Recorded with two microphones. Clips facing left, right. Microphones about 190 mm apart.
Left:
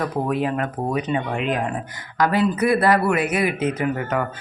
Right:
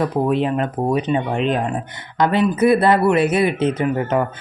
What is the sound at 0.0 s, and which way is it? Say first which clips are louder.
Speech: right 4 dB; 25° right (ahead or behind).